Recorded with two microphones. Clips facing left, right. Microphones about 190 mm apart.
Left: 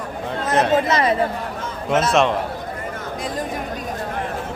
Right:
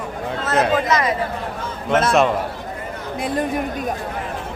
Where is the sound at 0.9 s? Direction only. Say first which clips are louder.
Left 1 dB; 30° left (ahead or behind).